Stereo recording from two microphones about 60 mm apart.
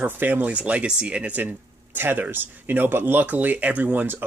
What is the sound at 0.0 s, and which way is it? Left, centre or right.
Speech, right.